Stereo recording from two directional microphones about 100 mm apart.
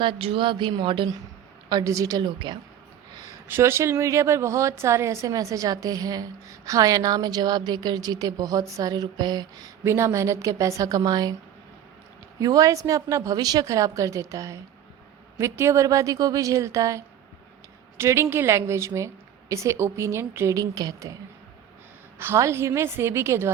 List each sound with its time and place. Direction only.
0.0 s speech: 55° right (ahead or behind)
1.8 s a woman's voice: 35° right (ahead or behind)
2.2 s speech: 55° right (ahead or behind)
3.5 s a woman's voice: 25° right (ahead or behind)
9.8 s a woman's voice: 30° right (ahead or behind)
12.4 s a woman's voice: 35° right (ahead or behind)
22.2 s a woman's voice: 25° right (ahead or behind)